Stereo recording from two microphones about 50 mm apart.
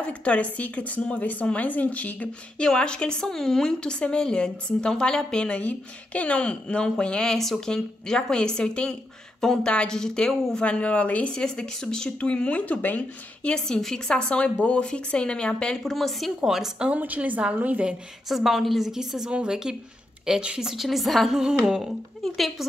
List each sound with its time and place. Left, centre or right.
0.0 s a woman's voice: left
2.6 s a woman's voice: centre
7.3 s a woman's voice: centre
10.6 s a woman's voice: left
11.4 s a woman's voice: centre; by 13.0 s left
13.4 s a woman's voice: centre
15.8 s a woman's voice: centre
16.4 s a woman's voice: centre
17.0 s a woman's voice: right
18.3 s a woman's voice: centre
20.7 s a woman's voice: centre
22.2 s a woman's voice: centre